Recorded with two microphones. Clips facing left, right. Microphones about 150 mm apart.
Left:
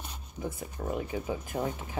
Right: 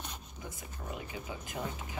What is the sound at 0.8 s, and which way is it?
Speech, 45° left (ahead or behind).